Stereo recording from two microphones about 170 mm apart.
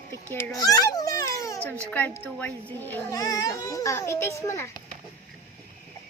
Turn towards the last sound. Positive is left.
turn(degrees=15)  # may be behind; listen again after turning